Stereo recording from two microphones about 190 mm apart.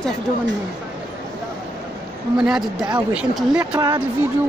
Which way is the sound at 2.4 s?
Centre (ahead or behind).